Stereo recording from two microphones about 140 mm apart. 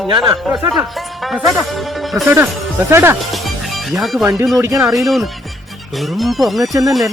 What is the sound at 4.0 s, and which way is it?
Speech, centre (ahead or behind).